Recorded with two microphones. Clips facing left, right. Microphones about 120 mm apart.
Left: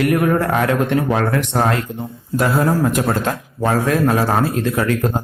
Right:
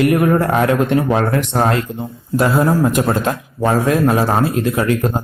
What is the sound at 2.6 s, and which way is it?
Speech, 15° right (ahead or behind).